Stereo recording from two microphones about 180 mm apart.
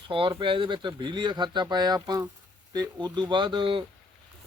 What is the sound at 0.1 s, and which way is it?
Speech, 25° right (ahead or behind).